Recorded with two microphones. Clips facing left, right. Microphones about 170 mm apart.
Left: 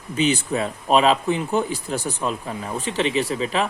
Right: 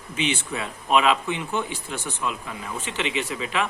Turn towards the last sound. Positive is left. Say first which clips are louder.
# left 4 dB
turn(degrees=35)  # may be behind; listen again after turning